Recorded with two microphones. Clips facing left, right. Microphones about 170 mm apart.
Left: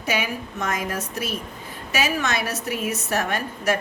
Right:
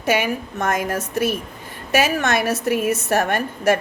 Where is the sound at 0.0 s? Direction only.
60° right (ahead or behind).